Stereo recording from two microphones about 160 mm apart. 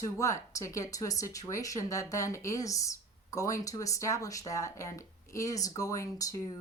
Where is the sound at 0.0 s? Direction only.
20° left (ahead or behind).